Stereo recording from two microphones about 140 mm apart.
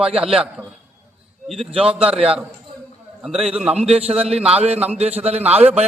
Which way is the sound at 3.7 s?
45° right (ahead or behind).